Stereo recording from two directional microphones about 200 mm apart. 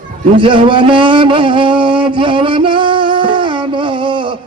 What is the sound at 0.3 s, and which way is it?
Speech, 25° right (ahead or behind).